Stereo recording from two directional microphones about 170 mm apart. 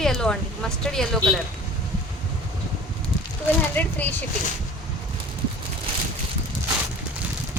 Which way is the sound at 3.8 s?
10° left (ahead or behind).